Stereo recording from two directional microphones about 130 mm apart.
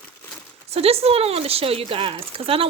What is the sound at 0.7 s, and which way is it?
Speech, 50° right (ahead or behind).